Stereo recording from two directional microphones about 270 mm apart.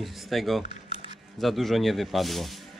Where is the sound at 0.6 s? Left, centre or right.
Centre.